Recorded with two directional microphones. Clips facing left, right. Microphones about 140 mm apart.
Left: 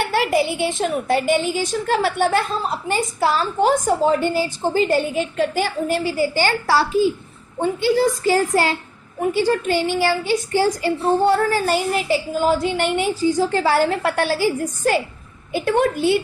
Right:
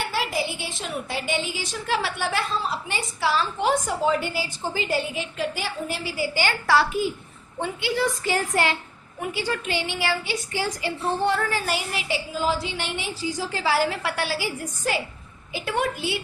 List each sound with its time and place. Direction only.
0.0 s a woman's voice: 60° left (ahead or behind)